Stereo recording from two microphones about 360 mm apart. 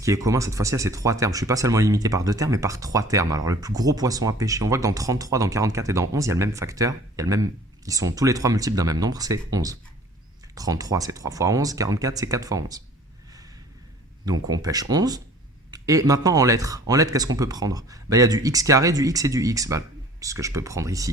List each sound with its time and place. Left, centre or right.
0.0 s speech: centre
14.4 s speech: centre